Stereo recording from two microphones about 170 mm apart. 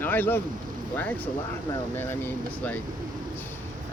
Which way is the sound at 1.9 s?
10° left (ahead or behind).